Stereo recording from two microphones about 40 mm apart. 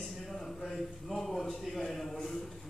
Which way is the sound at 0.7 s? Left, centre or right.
Centre.